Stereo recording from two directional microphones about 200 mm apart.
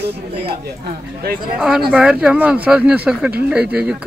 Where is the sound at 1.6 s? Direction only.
5° right (ahead or behind).